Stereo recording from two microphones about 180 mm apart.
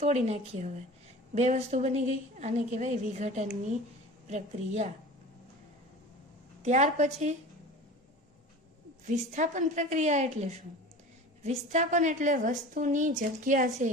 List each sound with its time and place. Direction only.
0.0 s a woman's voice: 40° right (ahead or behind)
6.6 s a woman's voice: 40° right (ahead or behind)
9.0 s a woman's voice: 40° right (ahead or behind)